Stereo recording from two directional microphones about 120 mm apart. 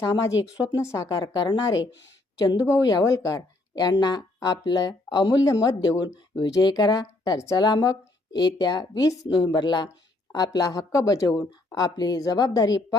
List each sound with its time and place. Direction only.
0.0 s a woman's voice: 30° left (ahead or behind)